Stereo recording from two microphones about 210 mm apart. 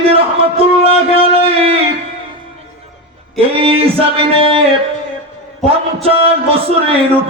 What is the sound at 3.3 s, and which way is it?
Music, 25° right (ahead or behind).